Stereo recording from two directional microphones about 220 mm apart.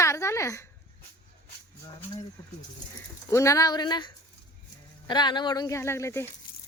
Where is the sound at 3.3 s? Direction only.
15° left (ahead or behind).